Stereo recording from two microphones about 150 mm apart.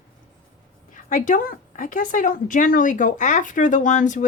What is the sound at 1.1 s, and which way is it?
Speech, 60° left (ahead or behind).